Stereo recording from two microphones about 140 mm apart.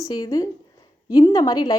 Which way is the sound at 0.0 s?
25° left (ahead or behind).